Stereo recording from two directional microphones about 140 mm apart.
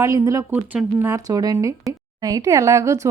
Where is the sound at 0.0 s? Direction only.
20° right (ahead or behind).